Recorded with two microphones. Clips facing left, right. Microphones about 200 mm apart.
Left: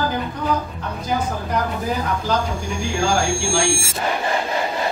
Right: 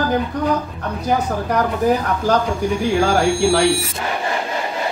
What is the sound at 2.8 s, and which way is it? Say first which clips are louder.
Speech: right 4 dB; 60° right (ahead or behind).